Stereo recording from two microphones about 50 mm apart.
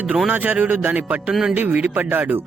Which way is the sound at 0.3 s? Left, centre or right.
Right.